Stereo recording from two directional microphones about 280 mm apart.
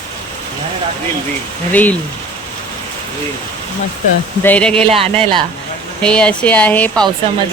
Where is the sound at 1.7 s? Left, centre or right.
Centre.